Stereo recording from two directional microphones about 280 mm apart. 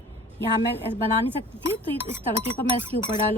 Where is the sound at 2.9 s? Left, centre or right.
Left.